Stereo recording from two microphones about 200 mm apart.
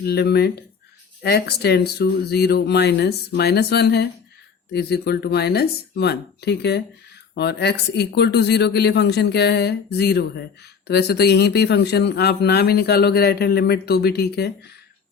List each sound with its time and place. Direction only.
0.0 s speech: 55° left (ahead or behind)